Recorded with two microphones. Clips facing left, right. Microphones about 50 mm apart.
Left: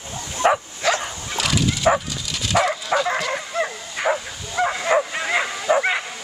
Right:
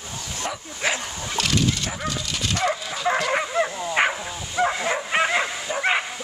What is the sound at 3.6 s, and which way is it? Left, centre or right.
Bow-wow, centre.